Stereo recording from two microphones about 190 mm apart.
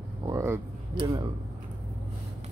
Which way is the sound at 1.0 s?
20° right (ahead or behind).